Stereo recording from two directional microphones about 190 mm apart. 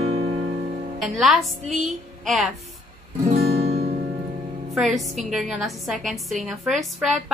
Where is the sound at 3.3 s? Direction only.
30° right (ahead or behind).